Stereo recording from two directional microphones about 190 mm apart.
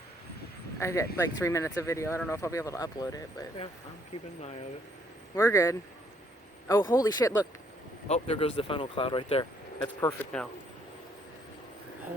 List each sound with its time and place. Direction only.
0.8 s speech: 15° left (ahead or behind)
5.3 s speech: 15° left (ahead or behind)
8.0 s speech: 30° left (ahead or behind)